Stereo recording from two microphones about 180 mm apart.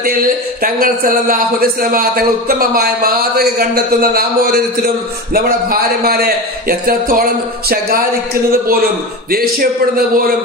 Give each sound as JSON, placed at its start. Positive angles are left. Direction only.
{"t": 0.6, "sound": "a man's voice", "side_deg": -50}
{"t": 6.0, "sound": "a man's voice", "side_deg": -60}
{"t": 9.3, "sound": "a man's voice", "side_deg": -55}